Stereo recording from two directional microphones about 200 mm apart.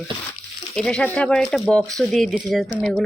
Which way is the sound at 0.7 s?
5° left (ahead or behind).